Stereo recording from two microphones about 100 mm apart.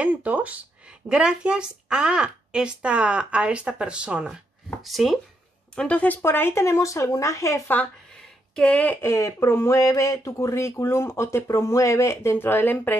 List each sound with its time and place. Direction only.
0.0 s speech: 15° right (ahead or behind)
5.8 s speech: 15° left (ahead or behind); by 7.7 s 30° left (ahead or behind)
7.7 s speech: 10° left (ahead or behind)